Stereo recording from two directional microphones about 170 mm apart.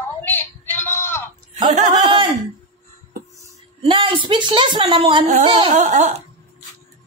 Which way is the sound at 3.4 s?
30° right (ahead or behind).